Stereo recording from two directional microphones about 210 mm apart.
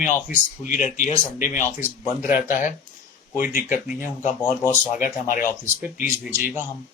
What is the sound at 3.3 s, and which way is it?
A man's voice, 40° left (ahead or behind).